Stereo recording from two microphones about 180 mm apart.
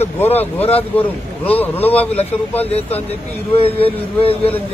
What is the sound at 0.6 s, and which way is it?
Speech, 35° left (ahead or behind).